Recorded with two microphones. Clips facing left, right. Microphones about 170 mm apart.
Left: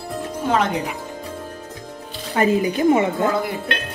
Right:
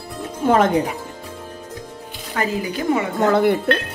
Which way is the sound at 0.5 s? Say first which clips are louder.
Right 5 dB; 50° right (ahead or behind).